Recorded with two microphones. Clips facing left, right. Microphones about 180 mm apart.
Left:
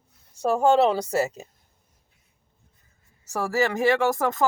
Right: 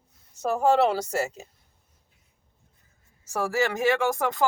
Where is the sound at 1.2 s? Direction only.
15° left (ahead or behind).